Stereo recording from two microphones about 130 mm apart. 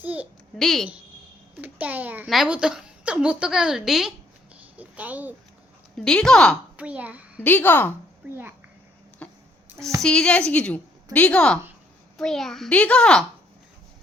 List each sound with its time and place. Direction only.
0.0 s a sound: 15° right (ahead or behind)
0.6 s a woman's voice: centre (ahead or behind)
1.6 s a child's voice: 15° right (ahead or behind)
2.2 s a woman's voice: centre (ahead or behind)
6.0 s a woman's voice: 5° left (ahead or behind)
6.7 s a child's voice: 10° right (ahead or behind)
7.4 s a woman's voice: 15° left (ahead or behind)
8.3 s a child's voice: 15° right (ahead or behind)
9.2 s music: 10° left (ahead or behind)
10.0 s a woman's voice: 5° left (ahead or behind)